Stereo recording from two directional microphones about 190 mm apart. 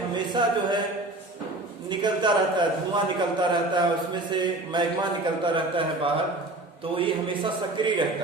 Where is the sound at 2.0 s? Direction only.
25° right (ahead or behind).